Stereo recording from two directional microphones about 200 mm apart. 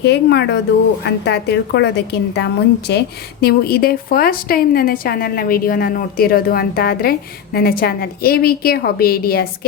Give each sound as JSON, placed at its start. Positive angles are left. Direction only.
{"t": 0.0, "sound": "a woman's voice", "side_deg": 55}